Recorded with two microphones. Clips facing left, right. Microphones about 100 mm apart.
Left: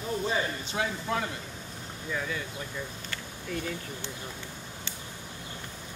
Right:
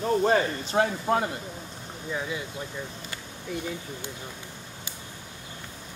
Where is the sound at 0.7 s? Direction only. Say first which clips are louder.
Right 7 dB; 45° right (ahead or behind).